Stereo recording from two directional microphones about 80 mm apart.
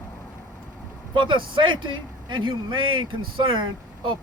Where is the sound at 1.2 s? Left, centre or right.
Right.